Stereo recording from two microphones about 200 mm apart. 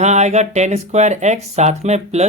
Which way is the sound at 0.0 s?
35° right (ahead or behind).